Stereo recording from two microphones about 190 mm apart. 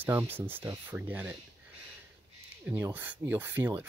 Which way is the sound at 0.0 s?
10° right (ahead or behind).